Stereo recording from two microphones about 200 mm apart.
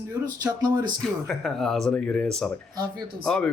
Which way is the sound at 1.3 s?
Centre (ahead or behind).